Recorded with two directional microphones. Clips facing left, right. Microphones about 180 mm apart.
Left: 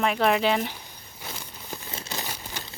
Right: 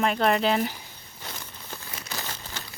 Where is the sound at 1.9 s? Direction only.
25° left (ahead or behind).